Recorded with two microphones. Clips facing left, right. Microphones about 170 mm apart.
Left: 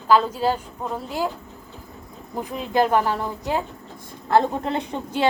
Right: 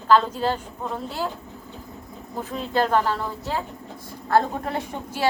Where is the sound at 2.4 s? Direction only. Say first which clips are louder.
Left 2 dB; 15° left (ahead or behind).